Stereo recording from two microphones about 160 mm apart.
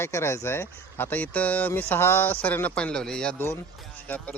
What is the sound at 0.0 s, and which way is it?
Speech, 15° left (ahead or behind).